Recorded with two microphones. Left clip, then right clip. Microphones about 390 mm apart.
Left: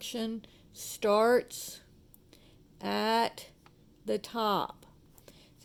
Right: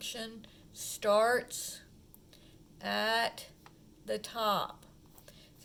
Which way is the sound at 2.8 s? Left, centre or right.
Centre.